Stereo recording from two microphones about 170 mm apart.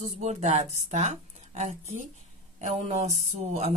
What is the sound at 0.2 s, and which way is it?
A woman's voice, 45° right (ahead or behind).